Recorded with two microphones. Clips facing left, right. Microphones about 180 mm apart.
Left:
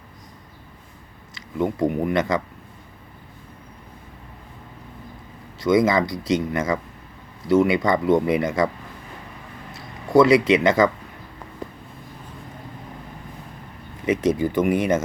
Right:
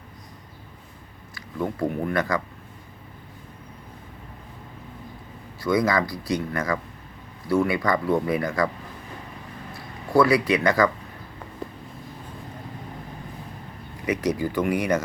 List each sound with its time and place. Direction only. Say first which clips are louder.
1.4 s speech: left 4 dB; 20° left (ahead or behind)
5.5 s speech: left 4 dB; 20° left (ahead or behind)
9.7 s speech: left 4 dB; 20° left (ahead or behind)
14.0 s speech: left 4 dB; 25° left (ahead or behind)